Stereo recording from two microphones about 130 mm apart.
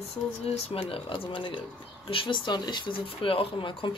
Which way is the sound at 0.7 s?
45° left (ahead or behind).